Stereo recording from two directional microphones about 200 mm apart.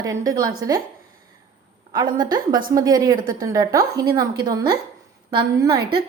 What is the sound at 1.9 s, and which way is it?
A woman's voice, 20° right (ahead or behind).